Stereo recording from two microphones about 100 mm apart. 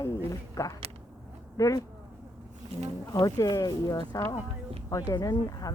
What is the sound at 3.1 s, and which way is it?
Speech, 35° left (ahead or behind).